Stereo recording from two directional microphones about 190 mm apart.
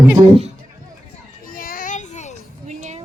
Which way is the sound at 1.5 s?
45° left (ahead or behind).